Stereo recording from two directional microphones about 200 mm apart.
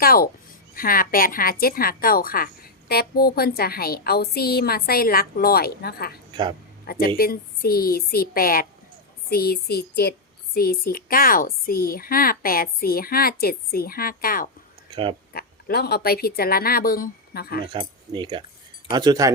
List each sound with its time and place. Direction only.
0.0 s a woman's voice: 45° left (ahead or behind)
17.7 s speech: 25° right (ahead or behind)